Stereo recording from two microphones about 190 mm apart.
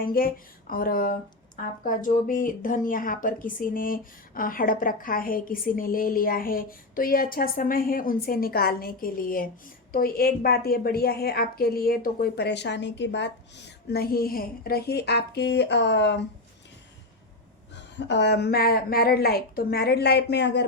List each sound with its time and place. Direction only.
0.0 s a woman's voice: 50° left (ahead or behind); by 16.2 s 65° left (ahead or behind)
17.9 s a woman's voice: 65° left (ahead or behind)